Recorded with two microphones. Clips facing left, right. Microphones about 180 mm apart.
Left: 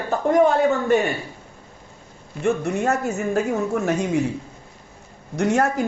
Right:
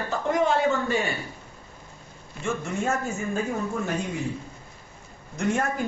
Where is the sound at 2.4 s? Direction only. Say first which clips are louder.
Left 7 dB; 65° left (ahead or behind); by 4.2 s 80° left.